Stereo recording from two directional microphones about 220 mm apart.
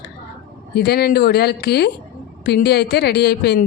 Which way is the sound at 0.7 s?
45° left (ahead or behind).